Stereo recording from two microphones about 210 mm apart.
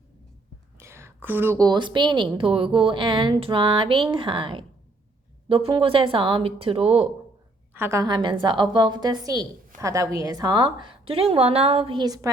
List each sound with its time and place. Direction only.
0.8 s a woman's voice: 10° right (ahead or behind)
7.7 s a woman's voice: 10° right (ahead or behind)